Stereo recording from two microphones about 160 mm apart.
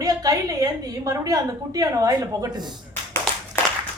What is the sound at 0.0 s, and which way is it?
A woman's voice, 20° right (ahead or behind).